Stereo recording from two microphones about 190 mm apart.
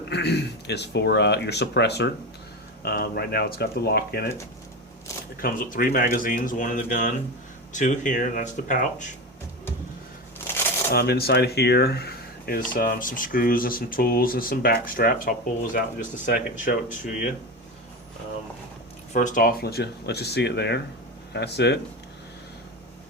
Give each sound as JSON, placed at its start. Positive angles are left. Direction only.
{"t": 0.1, "sound": "speech", "side_deg": 60}
{"t": 5.4, "sound": "speech", "side_deg": 45}
{"t": 10.9, "sound": "speech", "side_deg": 60}
{"t": 19.1, "sound": "speech", "side_deg": 45}